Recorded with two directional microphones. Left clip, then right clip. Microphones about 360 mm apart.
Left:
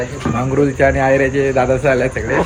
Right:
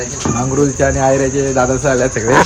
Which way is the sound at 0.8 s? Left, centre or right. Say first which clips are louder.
Left 1 dB; centre.